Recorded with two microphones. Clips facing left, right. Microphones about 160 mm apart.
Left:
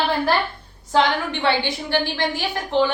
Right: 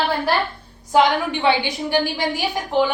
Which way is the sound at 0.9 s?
15° right (ahead or behind).